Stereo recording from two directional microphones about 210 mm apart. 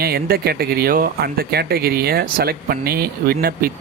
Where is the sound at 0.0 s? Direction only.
45° right (ahead or behind).